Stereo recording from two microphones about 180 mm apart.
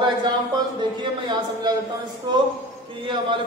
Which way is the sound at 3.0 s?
25° right (ahead or behind).